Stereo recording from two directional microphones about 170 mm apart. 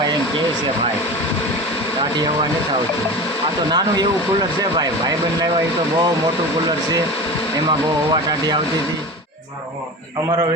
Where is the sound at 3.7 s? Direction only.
25° right (ahead or behind).